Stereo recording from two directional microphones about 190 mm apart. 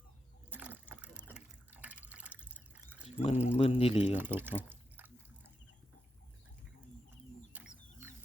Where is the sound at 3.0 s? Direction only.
35° left (ahead or behind).